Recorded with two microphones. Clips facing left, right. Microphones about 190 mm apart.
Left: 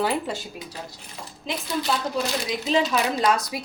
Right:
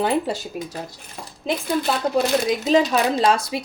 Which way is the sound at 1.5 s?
55° right (ahead or behind).